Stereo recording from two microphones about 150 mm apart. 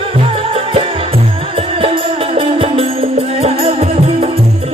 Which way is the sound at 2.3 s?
40° right (ahead or behind).